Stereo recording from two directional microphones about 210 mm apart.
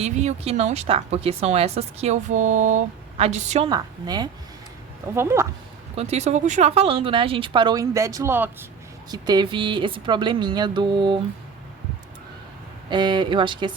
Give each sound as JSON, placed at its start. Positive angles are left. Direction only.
{"t": 0.0, "sound": "a woman's voice", "side_deg": -30}
{"t": 3.7, "sound": "speech", "side_deg": -20}
{"t": 6.0, "sound": "speech", "side_deg": -30}
{"t": 12.9, "sound": "speech", "side_deg": -20}